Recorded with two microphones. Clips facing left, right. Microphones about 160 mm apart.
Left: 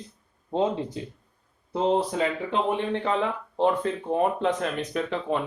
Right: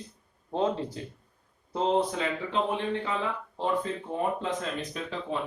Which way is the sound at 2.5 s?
65° left (ahead or behind).